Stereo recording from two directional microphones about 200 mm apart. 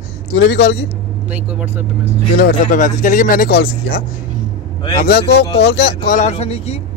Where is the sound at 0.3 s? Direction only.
60° left (ahead or behind).